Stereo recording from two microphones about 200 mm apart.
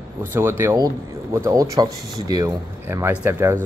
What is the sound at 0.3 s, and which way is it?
Speech, 10° right (ahead or behind).